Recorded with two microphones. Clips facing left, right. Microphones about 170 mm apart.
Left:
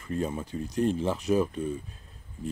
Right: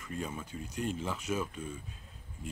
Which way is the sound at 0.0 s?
35° left (ahead or behind).